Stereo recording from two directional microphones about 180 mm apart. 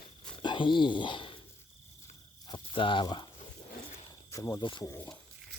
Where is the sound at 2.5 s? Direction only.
25° left (ahead or behind).